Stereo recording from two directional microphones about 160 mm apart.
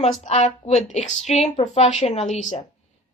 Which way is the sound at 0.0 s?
45° left (ahead or behind).